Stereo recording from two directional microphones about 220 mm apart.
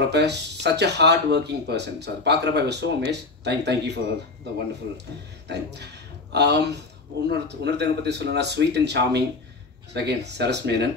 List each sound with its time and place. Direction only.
0.1 s speech: 50° right (ahead or behind)
5.5 s speech: 50° right (ahead or behind)